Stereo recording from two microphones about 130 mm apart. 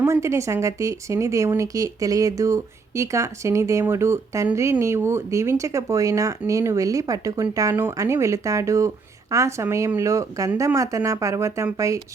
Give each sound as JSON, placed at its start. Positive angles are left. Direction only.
{"t": 0.0, "sound": "speech", "side_deg": -20}